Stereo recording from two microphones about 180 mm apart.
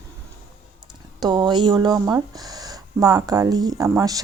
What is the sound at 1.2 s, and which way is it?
A woman's voice, 20° right (ahead or behind).